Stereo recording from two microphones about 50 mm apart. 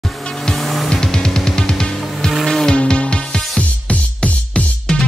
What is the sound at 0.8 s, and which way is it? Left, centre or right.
Music, centre.